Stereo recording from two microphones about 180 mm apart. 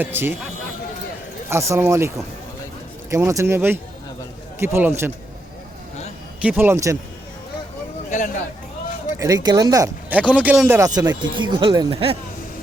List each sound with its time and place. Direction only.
0.0 s speech: 10° right (ahead or behind)
1.5 s speech: 15° right (ahead or behind)
6.4 s speech: 10° right (ahead or behind)
9.1 s speech: 20° right (ahead or behind)
10.1 s speech: 5° right (ahead or behind)
10.8 s speech: 20° right (ahead or behind)